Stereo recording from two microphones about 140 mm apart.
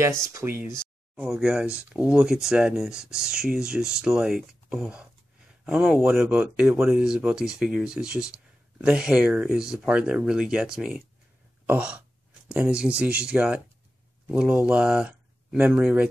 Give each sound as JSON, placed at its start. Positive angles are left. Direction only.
{"t": 0.3, "sound": "speech", "side_deg": -20}
{"t": 1.1, "sound": "speech", "side_deg": -5}
{"t": 11.6, "sound": "a sound", "side_deg": -10}
{"t": 12.4, "sound": "speech", "side_deg": -5}